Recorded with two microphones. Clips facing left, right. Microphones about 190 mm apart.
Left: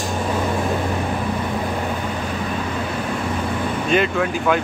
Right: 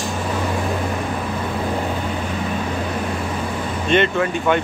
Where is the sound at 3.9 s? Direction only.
Centre (ahead or behind).